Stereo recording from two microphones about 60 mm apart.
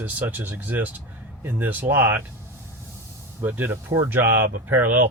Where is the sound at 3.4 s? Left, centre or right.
Right.